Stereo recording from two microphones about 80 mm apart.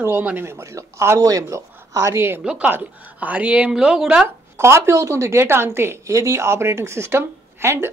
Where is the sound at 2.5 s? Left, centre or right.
Centre.